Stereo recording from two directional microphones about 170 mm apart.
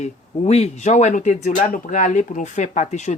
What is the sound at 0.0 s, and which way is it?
Speech, 40° left (ahead or behind).